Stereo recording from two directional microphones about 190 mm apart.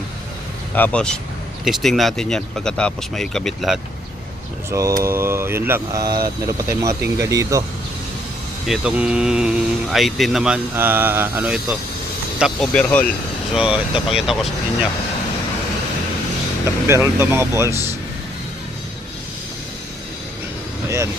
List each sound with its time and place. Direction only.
0.8 s speech: 5° left (ahead or behind)
4.7 s speech: 15° right (ahead or behind)
8.6 s speech: 5° right (ahead or behind)
13.5 s speech: 5° right (ahead or behind)
16.8 s speech: 15° right (ahead or behind)